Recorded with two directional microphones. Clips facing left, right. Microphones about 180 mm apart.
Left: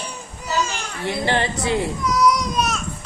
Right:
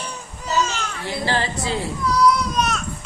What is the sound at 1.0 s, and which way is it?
A child's voice, 20° left (ahead or behind).